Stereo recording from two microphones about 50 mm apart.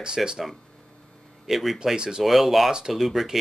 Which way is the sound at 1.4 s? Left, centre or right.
Centre.